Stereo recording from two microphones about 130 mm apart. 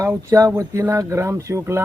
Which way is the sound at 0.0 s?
20° right (ahead or behind).